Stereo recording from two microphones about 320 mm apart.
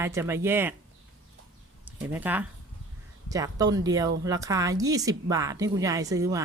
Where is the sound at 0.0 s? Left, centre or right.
Centre.